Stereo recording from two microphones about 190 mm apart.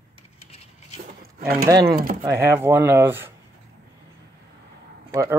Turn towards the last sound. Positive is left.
turn(degrees=-15)  # may be behind; listen again after turning